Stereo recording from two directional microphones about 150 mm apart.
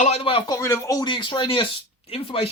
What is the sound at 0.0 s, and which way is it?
Speech, 45° left (ahead or behind).